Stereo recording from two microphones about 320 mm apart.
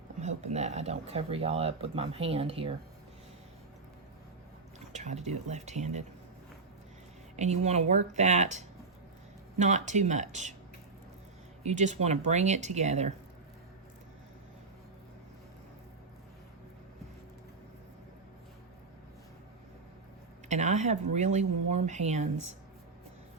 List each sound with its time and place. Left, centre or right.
0.2 s speech: right
4.9 s speech: right
7.3 s speech: right
11.6 s speech: right
20.5 s speech: right